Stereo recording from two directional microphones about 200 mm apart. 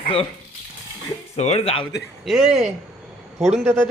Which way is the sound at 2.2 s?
Centre (ahead or behind).